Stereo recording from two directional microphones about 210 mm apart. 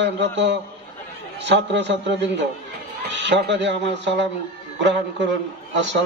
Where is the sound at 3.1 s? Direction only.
55° right (ahead or behind).